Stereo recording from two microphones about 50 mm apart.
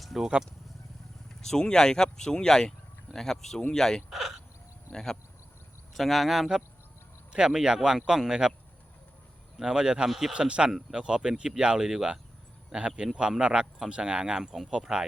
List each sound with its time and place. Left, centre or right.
0.0 s a sound: centre
1.4 s speech: centre
4.1 s a sound: centre
4.9 s speech: centre
5.9 s speech: centre
9.6 s speech: centre
10.1 s speech: centre
10.3 s speech: right